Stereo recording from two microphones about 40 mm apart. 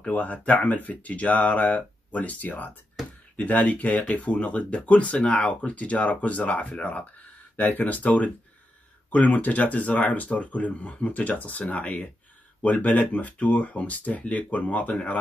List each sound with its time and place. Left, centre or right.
0.1 s speech: left
7.5 s speech: left